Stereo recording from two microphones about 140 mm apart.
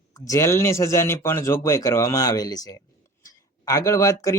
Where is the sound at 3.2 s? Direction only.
25° left (ahead or behind).